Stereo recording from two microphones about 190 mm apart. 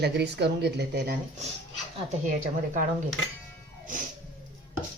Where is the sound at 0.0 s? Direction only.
60° right (ahead or behind).